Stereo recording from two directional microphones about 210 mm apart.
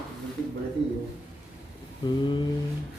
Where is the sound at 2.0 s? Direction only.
20° left (ahead or behind).